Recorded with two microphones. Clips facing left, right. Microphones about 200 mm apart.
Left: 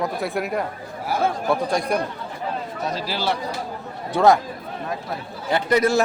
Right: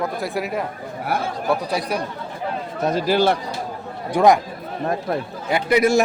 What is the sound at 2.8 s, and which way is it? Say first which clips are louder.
Speech: right 10 dB; 50° right (ahead or behind).